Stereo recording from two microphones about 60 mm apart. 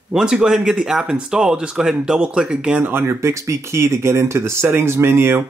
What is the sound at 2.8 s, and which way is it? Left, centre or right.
Speech, right.